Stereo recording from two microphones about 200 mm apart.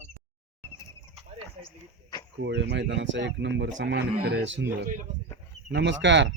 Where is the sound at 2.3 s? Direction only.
60° right (ahead or behind).